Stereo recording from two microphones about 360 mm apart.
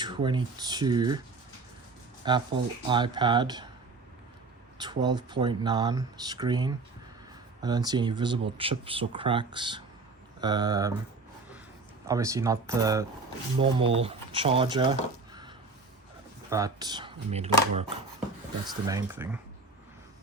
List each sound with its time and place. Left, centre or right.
0.0 s speech: centre
2.2 s speech: centre
4.8 s speech: centre
12.0 s speech: centre
15.3 s a sound: centre
16.5 s speech: centre